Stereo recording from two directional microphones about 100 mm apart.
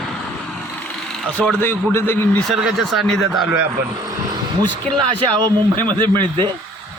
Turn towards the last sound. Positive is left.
turn(degrees=-50)  # may be behind; listen again after turning